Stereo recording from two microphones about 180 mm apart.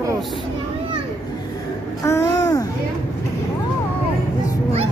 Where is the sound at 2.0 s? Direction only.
15° left (ahead or behind).